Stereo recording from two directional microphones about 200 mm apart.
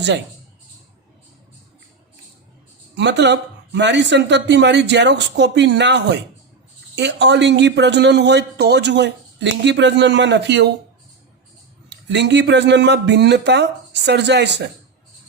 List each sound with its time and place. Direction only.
2.9 s a man's voice: 60° right (ahead or behind)
11.9 s a man's voice: 60° right (ahead or behind)